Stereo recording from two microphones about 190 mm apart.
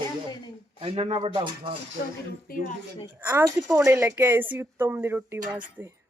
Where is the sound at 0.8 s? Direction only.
30° right (ahead or behind).